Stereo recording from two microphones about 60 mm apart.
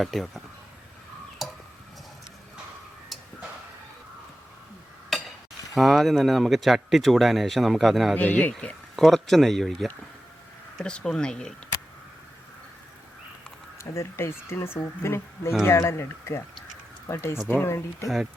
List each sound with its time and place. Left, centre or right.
0.0 s speech: centre
1.4 s tick-tock: centre
5.1 s a sound: centre
5.7 s speech: centre
8.1 s speech: left
9.0 s speech: centre
13.9 s speech: left